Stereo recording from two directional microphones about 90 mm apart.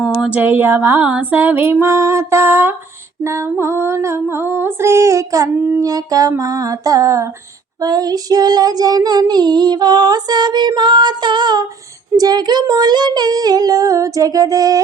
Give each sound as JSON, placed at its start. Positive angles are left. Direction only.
{"t": 0.3, "sound": "female singing", "side_deg": -20}
{"t": 3.2, "sound": "a sound", "side_deg": -30}
{"t": 3.6, "sound": "female singing", "side_deg": -30}
{"t": 5.8, "sound": "child singing", "side_deg": -45}
{"t": 6.3, "sound": "a sound", "side_deg": -40}
{"t": 7.8, "sound": "child singing", "side_deg": -45}